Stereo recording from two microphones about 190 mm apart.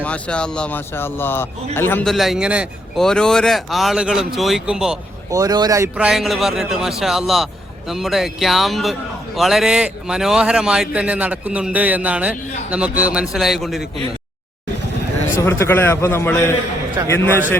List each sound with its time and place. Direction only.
0.0 s speech: 5° left (ahead or behind)
5.3 s speech: 20° right (ahead or behind)
6.1 s speech: centre (ahead or behind)
15.4 s a man's voice: 15° left (ahead or behind)
17.0 s speech: 15° right (ahead or behind)